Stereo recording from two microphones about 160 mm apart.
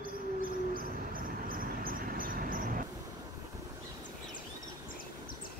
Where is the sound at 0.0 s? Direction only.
65° right (ahead or behind).